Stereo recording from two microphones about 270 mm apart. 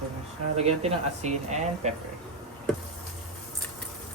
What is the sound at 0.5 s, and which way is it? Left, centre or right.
Speech, right.